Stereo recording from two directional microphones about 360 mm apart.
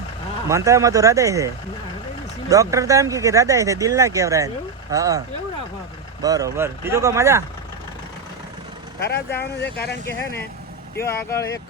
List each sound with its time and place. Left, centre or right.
0.4 s speech: centre
2.5 s speech: centre
6.2 s speech: centre
9.0 s speech: left
9.3 s speech: centre
11.0 s speech: centre